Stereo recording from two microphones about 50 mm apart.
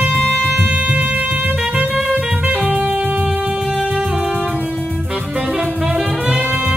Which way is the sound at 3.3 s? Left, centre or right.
Centre.